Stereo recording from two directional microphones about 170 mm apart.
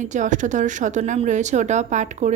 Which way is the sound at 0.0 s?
45° right (ahead or behind).